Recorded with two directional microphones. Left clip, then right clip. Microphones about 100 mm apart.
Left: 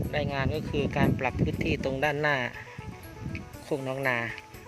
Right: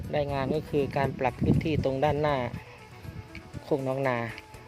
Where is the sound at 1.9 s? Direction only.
10° right (ahead or behind).